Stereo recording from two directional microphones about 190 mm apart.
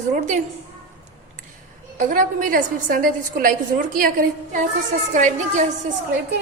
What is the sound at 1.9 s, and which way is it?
A woman's voice, 45° right (ahead or behind).